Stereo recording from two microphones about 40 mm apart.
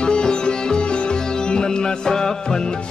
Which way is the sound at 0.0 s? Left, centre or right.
Left.